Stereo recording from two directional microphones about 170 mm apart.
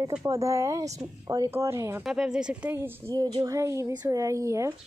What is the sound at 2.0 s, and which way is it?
Speech, 5° right (ahead or behind).